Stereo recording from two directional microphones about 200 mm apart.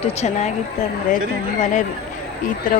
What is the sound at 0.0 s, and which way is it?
Speech, 35° left (ahead or behind).